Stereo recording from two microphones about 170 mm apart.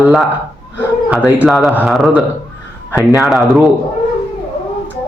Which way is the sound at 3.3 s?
Centre (ahead or behind).